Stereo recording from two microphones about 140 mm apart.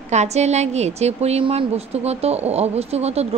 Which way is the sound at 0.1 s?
55° right (ahead or behind).